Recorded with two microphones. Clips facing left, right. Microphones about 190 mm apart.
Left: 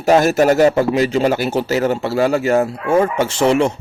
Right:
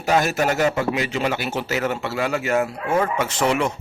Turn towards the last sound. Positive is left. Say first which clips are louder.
# left 6 dB
turn(degrees=30)  # may be behind; listen again after turning